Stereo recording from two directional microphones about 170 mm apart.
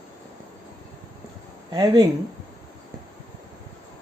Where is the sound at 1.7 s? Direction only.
25° right (ahead or behind).